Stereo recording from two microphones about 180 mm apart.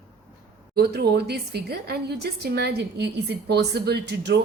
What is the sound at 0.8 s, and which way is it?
A woman's voice, 65° right (ahead or behind).